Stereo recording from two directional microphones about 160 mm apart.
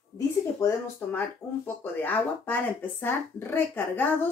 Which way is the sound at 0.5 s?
15° left (ahead or behind).